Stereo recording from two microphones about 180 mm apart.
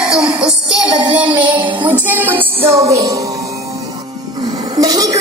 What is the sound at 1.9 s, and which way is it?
Music, 10° right (ahead or behind).